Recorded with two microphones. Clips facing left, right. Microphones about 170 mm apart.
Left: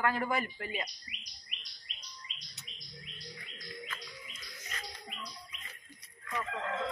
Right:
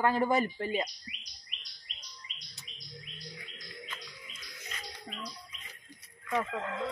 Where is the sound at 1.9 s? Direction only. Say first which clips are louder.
Right 1 dB; 40° right (ahead or behind).